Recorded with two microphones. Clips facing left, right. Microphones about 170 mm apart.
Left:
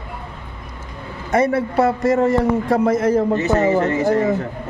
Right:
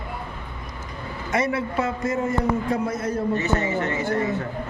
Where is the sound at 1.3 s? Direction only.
55° left (ahead or behind); by 3.2 s 90° left.